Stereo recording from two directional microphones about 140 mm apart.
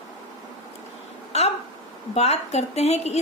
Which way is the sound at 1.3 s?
50° left (ahead or behind).